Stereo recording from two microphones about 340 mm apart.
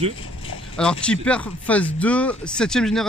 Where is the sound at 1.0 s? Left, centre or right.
Centre.